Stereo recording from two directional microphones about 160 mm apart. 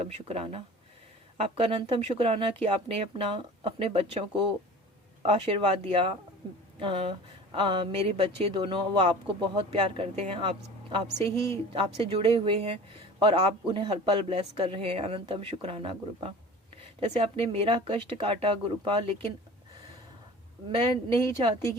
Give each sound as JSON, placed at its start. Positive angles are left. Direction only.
{"t": 0.0, "sound": "speech", "side_deg": -40}
{"t": 11.3, "sound": "a woman's voice", "side_deg": 15}
{"t": 11.7, "sound": "speech", "side_deg": -35}